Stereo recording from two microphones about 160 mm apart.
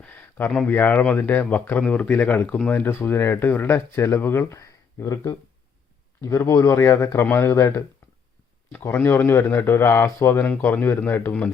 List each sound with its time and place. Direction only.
0.0 s a man's voice: 10° left (ahead or behind)